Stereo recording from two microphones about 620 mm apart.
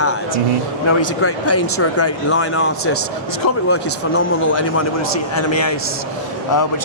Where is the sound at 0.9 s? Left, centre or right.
Left.